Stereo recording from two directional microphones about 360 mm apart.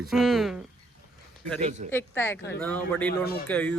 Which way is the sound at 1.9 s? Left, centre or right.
Centre.